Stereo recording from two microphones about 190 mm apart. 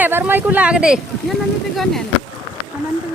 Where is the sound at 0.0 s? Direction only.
10° right (ahead or behind).